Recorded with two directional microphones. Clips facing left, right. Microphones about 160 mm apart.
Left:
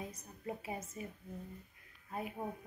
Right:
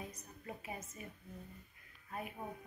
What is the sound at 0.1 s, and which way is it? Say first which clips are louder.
Speech: left 5 dB; 25° left (ahead or behind).